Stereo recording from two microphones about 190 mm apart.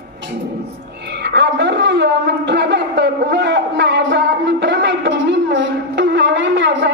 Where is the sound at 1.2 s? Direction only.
65° right (ahead or behind).